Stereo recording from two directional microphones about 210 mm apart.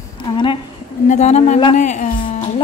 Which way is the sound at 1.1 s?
35° left (ahead or behind).